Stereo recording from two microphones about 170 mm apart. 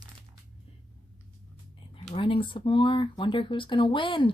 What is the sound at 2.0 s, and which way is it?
Speech, 30° left (ahead or behind).